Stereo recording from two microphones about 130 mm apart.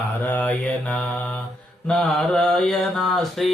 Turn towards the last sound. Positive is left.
turn(degrees=0)  # may be behind; listen again after turning